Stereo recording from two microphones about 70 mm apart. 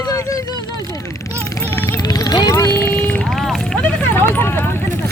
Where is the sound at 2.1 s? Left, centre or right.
Left.